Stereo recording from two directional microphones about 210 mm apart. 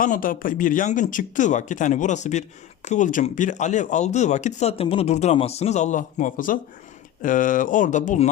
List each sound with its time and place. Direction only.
0.0 s speech: 40° left (ahead or behind)